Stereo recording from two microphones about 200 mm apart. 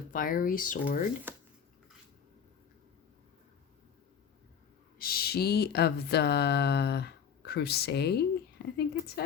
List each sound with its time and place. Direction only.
0.1 s speech: 45° left (ahead or behind)
4.9 s speech: 50° left (ahead or behind)